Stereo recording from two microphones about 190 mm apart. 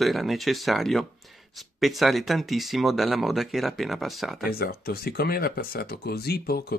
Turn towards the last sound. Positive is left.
turn(degrees=55)  # may be behind; listen again after turning